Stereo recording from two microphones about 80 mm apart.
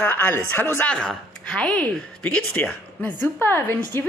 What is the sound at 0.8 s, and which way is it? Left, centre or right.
Speech, centre.